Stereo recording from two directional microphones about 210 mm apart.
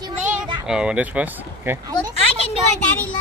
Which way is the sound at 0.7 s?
5° right (ahead or behind).